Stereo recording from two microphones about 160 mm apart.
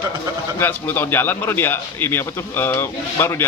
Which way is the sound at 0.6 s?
10° left (ahead or behind).